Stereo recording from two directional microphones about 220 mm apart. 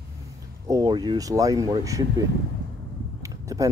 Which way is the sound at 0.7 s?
20° right (ahead or behind).